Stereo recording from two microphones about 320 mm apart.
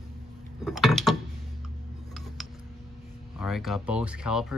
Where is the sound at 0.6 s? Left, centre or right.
Centre.